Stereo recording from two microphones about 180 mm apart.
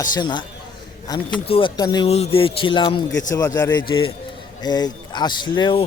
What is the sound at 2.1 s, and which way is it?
Speech, 35° left (ahead or behind).